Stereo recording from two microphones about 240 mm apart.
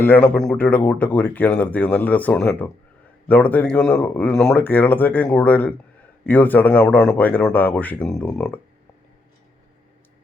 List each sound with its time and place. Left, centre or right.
0.0 s speech: centre